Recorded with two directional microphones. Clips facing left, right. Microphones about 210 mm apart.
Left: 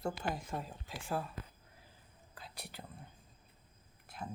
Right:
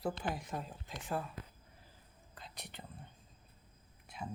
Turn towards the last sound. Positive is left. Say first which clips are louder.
# even
turn(degrees=0)  # may be behind; listen again after turning